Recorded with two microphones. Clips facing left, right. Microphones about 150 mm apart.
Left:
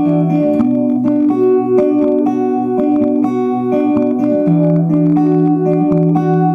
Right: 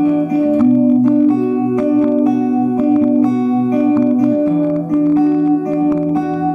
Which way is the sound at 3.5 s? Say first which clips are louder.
Even; 35° left (ahead or behind).